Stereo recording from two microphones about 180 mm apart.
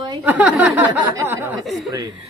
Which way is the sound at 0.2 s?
10° right (ahead or behind).